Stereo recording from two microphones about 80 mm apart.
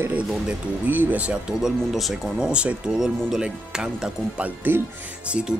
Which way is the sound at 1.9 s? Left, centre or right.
Centre.